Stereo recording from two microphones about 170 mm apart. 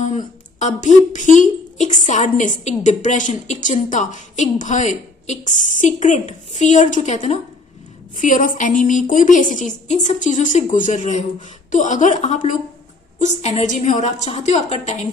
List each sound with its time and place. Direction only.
0.0 s a woman's voice: 45° left (ahead or behind)